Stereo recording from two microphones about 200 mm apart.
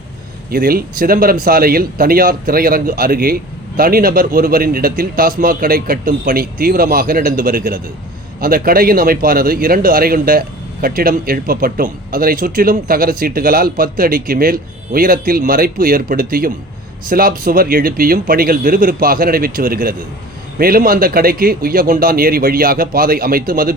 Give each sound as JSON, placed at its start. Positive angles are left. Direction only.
{"t": 0.5, "sound": "a man's voice", "side_deg": -50}